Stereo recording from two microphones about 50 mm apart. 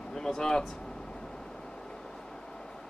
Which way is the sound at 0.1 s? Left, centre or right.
Centre.